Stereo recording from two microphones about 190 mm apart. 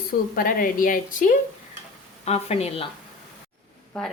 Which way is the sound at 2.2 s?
35° left (ahead or behind).